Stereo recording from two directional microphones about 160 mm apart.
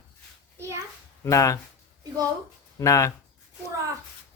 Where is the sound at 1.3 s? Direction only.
20° left (ahead or behind).